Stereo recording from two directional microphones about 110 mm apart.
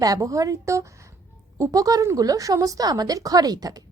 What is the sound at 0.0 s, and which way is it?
A woman's voice, 30° right (ahead or behind).